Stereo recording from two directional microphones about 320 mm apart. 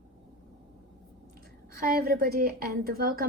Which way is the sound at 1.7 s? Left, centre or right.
Right.